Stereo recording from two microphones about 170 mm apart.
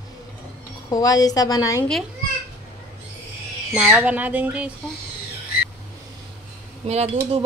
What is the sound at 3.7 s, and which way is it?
Speech, 5° right (ahead or behind).